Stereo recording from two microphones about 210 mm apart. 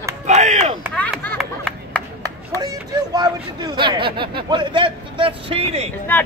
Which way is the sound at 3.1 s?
20° right (ahead or behind).